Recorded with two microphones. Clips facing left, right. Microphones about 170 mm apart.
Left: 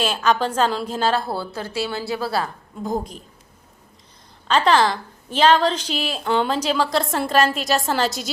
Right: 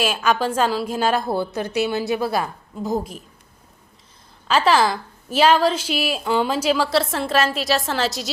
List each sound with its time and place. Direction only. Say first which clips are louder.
0.0 s a woman's voice: even; 10° right (ahead or behind)
2.8 s a woman's voice: right 1 dB; 5° right (ahead or behind)
4.4 s a woman's voice: even; 5° right (ahead or behind)